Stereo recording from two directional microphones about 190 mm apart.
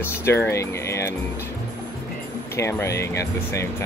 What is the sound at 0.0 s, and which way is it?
Speech, 15° left (ahead or behind).